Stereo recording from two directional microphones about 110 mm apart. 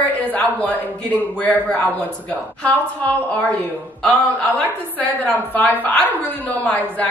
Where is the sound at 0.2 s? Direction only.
15° left (ahead or behind).